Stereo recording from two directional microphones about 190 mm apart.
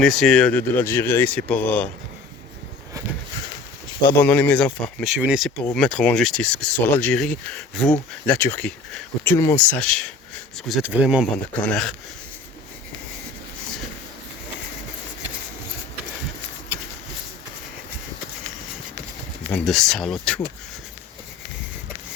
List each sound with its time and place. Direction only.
0.0 s speech: centre (ahead or behind)
4.1 s speech: 10° left (ahead or behind)
5.1 s speech: 5° right (ahead or behind)
19.5 s speech: 5° left (ahead or behind)